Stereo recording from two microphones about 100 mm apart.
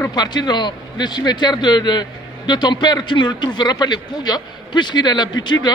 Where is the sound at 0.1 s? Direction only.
45° left (ahead or behind).